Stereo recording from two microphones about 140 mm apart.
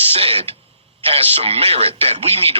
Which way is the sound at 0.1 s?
45° right (ahead or behind).